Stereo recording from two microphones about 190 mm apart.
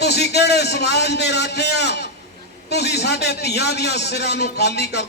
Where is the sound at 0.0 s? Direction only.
60° left (ahead or behind).